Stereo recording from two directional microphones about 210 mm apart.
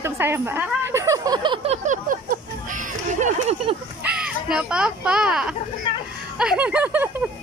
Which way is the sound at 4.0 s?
5° right (ahead or behind).